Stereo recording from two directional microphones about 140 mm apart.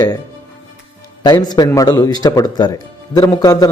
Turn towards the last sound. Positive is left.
turn(degrees=25)  # may be behind; listen again after turning